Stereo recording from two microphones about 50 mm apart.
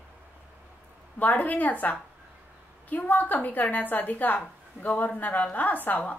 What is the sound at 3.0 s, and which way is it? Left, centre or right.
A woman's voice, left.